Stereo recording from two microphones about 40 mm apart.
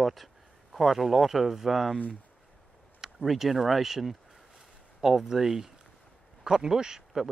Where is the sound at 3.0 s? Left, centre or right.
Centre.